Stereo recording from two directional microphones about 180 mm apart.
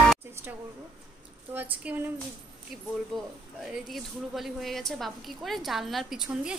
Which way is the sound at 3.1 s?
Centre (ahead or behind).